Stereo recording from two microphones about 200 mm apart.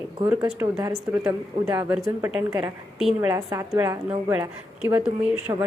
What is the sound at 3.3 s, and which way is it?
A woman's voice, 15° right (ahead or behind).